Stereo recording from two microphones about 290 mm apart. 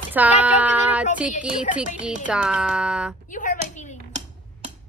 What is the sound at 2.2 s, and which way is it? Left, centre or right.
Child singing, centre.